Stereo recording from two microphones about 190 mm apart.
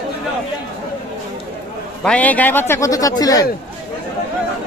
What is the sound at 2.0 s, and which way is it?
A man's voice, 5° left (ahead or behind).